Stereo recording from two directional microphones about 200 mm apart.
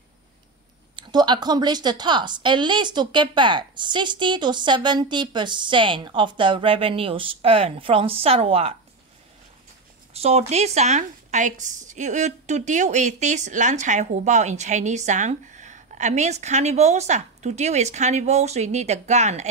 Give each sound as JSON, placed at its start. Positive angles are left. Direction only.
{"t": 0.9, "sound": "a woman's voice", "side_deg": -20}
{"t": 10.1, "sound": "speech", "side_deg": -30}